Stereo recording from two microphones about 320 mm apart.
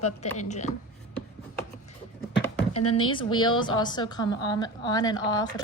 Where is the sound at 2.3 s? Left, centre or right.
Left.